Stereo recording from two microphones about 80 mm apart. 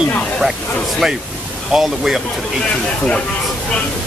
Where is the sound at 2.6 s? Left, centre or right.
Centre.